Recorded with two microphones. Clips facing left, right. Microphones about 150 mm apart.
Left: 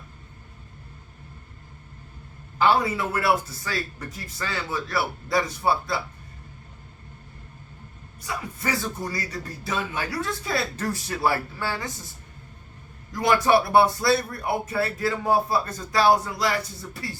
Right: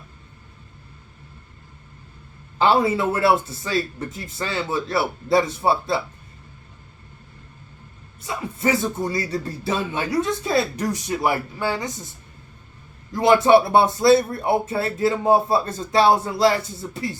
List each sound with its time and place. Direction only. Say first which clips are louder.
2.6 s speech: right 3 dB; 25° right (ahead or behind)
8.2 s speech: right 6 dB; 25° right (ahead or behind)
13.1 s speech: right 6 dB; 25° right (ahead or behind)